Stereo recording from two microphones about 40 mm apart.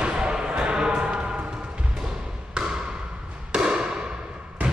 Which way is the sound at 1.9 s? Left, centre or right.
Centre.